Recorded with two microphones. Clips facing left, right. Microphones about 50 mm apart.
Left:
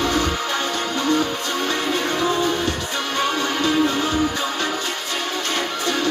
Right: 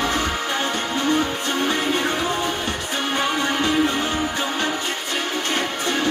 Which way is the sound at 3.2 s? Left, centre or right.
Right.